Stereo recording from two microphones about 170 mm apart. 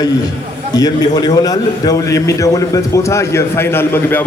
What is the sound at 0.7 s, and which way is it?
A man's voice, 20° left (ahead or behind).